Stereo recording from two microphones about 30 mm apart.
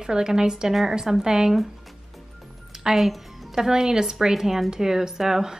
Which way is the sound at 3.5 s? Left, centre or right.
Centre.